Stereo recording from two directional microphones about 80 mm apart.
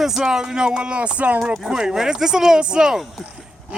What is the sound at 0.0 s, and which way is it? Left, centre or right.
Speech, centre.